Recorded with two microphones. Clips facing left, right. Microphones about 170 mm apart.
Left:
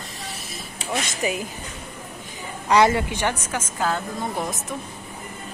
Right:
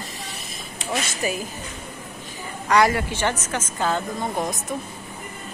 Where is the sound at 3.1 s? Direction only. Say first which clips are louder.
Right 1 dB; 10° left (ahead or behind).